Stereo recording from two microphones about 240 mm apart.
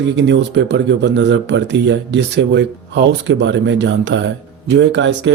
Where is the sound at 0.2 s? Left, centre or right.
Right.